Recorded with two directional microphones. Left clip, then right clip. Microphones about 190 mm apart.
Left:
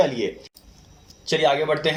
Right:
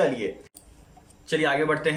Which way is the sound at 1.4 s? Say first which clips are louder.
Left 3 dB; 30° left (ahead or behind).